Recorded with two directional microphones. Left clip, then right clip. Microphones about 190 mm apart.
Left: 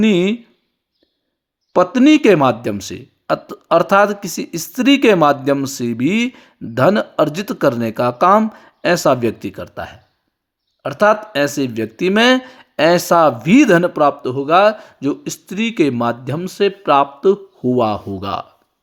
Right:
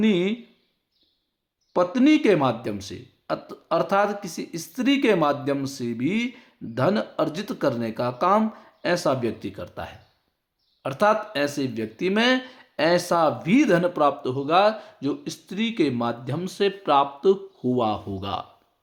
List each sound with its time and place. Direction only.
0.0 s speech: 40° left (ahead or behind)
1.7 s speech: 40° left (ahead or behind); by 18.4 s 25° left (ahead or behind)